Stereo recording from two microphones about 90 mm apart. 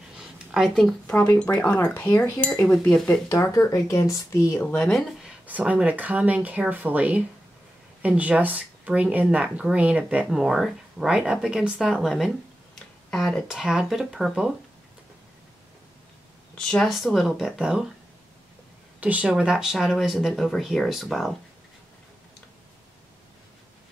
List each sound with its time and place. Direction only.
0.2 s a sound: 5° right (ahead or behind)
1.0 s speech: 15° left (ahead or behind)
3.3 s speech: 35° left (ahead or behind)
4.6 s speech: 5° left (ahead or behind)
5.5 s speech: 15° right (ahead or behind)
16.6 s speech: 5° left (ahead or behind)
18.9 s speech: 15° right (ahead or behind)